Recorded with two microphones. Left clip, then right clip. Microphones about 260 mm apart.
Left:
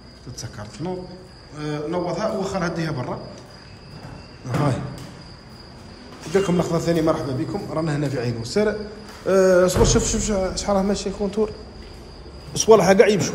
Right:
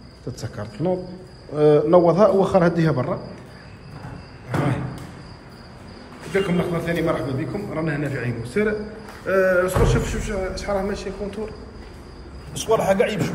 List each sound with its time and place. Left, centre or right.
0.4 s a man's voice: centre
6.3 s a man's voice: centre
12.5 s a man's voice: left